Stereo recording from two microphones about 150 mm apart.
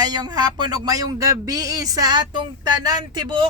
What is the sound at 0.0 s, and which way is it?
Speech, 25° right (ahead or behind).